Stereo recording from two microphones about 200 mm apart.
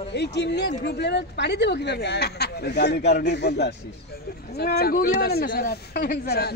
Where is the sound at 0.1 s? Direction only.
55° left (ahead or behind).